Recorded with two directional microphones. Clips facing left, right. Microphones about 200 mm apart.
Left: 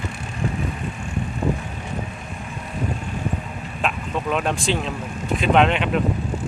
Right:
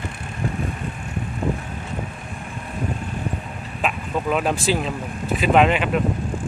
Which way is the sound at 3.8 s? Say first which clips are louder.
Right 1 dB; 5° right (ahead or behind).